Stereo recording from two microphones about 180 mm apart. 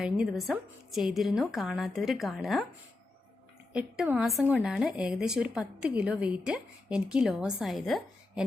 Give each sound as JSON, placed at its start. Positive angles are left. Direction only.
{"t": 0.0, "sound": "speech", "side_deg": -5}
{"t": 3.7, "sound": "speech", "side_deg": -5}